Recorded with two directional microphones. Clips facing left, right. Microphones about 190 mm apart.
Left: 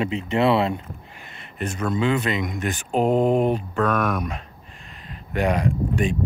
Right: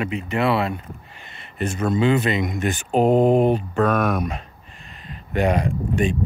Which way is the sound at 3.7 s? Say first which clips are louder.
Right 3 dB; 30° right (ahead or behind).